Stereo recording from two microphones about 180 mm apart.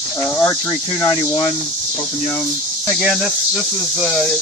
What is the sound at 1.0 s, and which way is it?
Speech, 15° left (ahead or behind).